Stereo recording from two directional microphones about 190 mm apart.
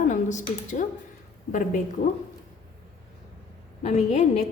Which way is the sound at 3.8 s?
35° left (ahead or behind).